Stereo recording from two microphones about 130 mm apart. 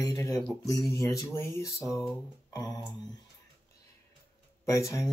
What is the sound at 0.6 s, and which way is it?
Speech, 25° left (ahead or behind).